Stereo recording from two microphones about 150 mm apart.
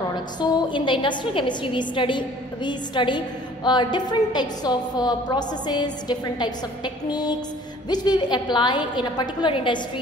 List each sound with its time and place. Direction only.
0.1 s a woman's voice: 30° left (ahead or behind)